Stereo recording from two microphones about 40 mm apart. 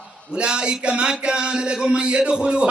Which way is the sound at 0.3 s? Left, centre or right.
Right.